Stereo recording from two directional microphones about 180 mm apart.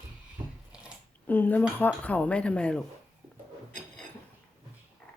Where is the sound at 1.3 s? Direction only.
10° left (ahead or behind).